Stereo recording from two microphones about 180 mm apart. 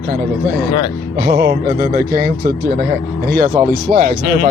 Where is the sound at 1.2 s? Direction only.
60° right (ahead or behind).